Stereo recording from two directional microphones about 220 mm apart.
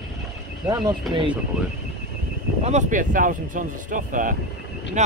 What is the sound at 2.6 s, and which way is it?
Speech, 35° right (ahead or behind).